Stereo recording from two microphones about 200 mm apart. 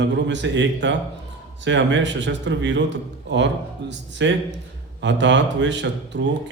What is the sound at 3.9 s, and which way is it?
A man's voice, 65° right (ahead or behind).